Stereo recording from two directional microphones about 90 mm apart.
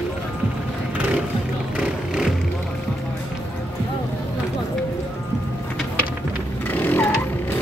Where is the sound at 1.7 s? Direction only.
5° right (ahead or behind).